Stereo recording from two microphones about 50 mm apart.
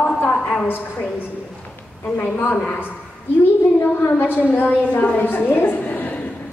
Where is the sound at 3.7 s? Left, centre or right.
Left.